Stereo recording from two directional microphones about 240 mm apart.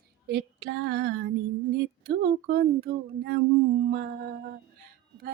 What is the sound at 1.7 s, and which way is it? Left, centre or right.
Speech, right.